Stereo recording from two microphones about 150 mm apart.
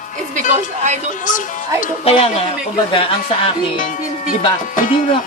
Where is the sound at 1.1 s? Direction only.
60° left (ahead or behind).